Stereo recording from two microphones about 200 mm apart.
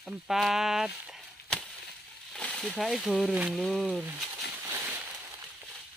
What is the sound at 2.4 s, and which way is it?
Speech, 5° left (ahead or behind).